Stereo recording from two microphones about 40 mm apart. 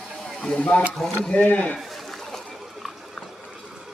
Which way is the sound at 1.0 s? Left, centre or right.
Centre.